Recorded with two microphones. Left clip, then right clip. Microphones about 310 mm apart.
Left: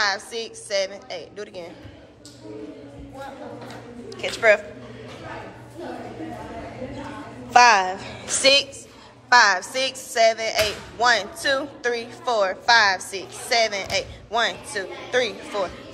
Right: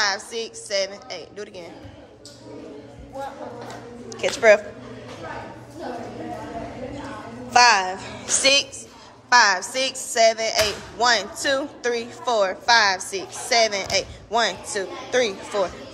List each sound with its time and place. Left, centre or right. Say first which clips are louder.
0.0 s speech: even; centre
4.2 s speech: right 2 dB; centre
7.5 s a woman's voice: left 1 dB; centre